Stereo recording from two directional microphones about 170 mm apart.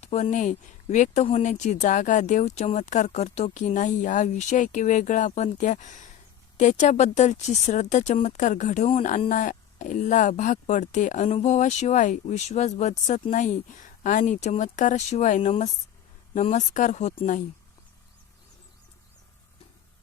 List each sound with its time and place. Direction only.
0.0 s speech: 40° left (ahead or behind)